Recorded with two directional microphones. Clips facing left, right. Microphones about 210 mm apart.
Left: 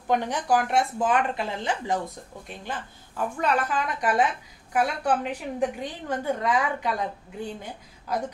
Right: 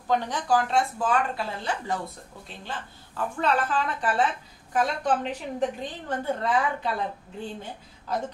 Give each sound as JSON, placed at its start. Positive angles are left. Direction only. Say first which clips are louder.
{"t": 0.1, "sound": "a woman's voice", "louder": "left 1 dB", "side_deg": 15}